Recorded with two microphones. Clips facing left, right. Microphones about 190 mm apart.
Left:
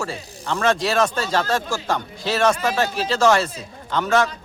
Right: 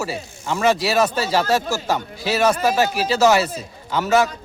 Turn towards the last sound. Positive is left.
turn(degrees=-5)  # may be behind; listen again after turning